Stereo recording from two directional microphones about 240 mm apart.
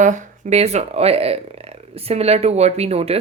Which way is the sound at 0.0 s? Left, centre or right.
Right.